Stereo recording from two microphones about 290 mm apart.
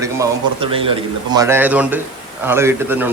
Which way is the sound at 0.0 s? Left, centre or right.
Centre.